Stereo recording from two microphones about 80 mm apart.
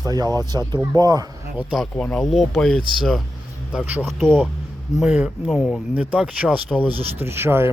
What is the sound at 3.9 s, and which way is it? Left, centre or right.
Speech, right.